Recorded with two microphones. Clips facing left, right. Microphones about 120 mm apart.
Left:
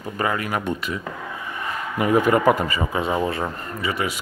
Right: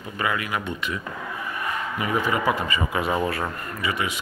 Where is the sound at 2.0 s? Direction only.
50° left (ahead or behind).